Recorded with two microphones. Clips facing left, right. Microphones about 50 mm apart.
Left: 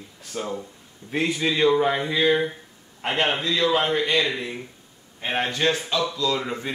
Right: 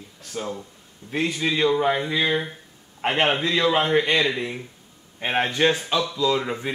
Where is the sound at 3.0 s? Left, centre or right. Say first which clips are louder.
Right 2 dB; centre.